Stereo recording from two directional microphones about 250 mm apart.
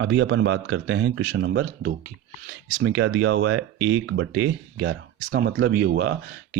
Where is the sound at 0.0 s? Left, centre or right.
Right.